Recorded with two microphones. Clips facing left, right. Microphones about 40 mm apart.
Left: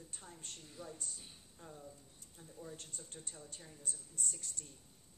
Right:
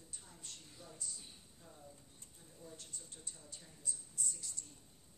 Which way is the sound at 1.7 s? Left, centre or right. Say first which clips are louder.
Left 5 dB; centre.